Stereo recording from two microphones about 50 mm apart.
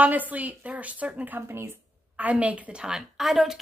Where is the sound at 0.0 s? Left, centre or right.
Right.